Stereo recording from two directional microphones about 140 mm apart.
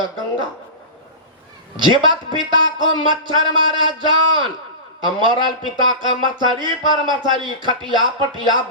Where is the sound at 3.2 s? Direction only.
35° right (ahead or behind).